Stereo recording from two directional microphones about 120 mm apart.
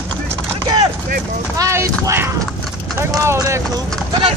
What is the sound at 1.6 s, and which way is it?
Speech, 25° right (ahead or behind).